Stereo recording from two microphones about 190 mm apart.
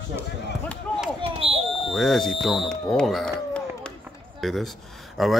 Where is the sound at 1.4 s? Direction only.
30° right (ahead or behind).